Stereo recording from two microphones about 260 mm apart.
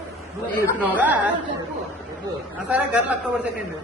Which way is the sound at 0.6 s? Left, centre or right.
Centre.